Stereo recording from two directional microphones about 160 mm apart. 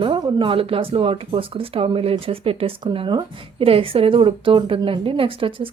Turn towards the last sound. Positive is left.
turn(degrees=-35)  # may be behind; listen again after turning